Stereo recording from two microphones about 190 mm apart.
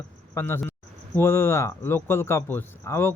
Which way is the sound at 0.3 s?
10° left (ahead or behind).